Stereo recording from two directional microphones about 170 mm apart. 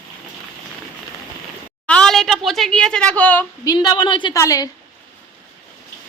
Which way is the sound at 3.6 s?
25° left (ahead or behind).